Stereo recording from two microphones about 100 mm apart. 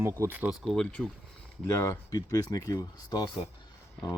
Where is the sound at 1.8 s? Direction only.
30° left (ahead or behind).